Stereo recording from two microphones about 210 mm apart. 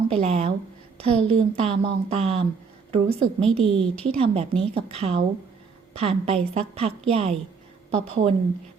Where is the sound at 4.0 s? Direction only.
25° right (ahead or behind).